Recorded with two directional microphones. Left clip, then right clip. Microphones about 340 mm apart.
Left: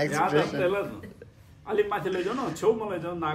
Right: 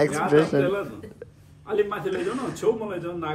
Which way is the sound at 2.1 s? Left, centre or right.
Centre.